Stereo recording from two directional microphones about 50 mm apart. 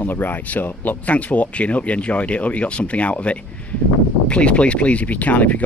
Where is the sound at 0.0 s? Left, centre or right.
Left.